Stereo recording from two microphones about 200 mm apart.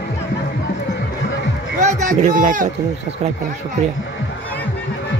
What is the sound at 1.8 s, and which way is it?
Speech, 40° right (ahead or behind).